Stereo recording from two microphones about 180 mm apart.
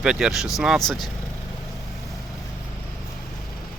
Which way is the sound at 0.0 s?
5° right (ahead or behind).